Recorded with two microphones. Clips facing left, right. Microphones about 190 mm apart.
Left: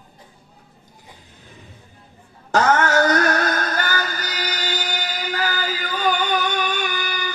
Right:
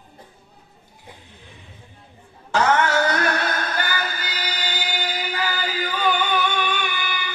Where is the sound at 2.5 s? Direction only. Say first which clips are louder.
Left 2 dB; 45° left (ahead or behind).